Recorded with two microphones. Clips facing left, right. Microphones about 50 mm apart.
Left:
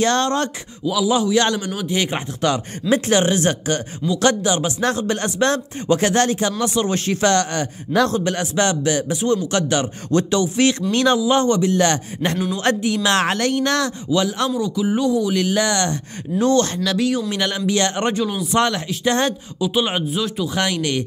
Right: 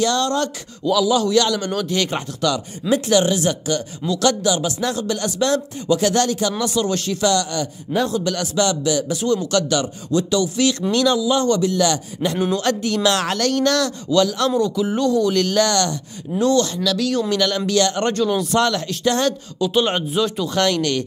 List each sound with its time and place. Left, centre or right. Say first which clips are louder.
0.0 s speech: left 1 dB; left
0.8 s speech: right 1 dB; centre
2.9 s speech: even; left
8.1 s speech: left 1 dB; left
12.5 s speech: left 1 dB; left
14.6 s speech: right 1 dB; centre
15.9 s speech: left 2 dB; left
18.1 s speech: right 1 dB; centre
19.6 s speech: right 1 dB; centre
20.5 s speech: right 3 dB; centre